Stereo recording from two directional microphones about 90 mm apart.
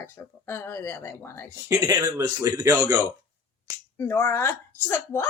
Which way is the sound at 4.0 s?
25° left (ahead or behind).